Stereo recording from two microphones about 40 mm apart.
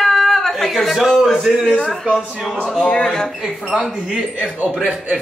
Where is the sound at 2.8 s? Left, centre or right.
Centre.